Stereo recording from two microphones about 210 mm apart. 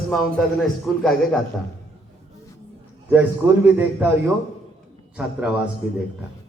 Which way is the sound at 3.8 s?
10° right (ahead or behind).